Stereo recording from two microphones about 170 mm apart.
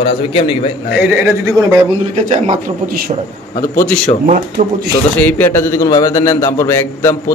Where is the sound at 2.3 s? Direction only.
40° right (ahead or behind).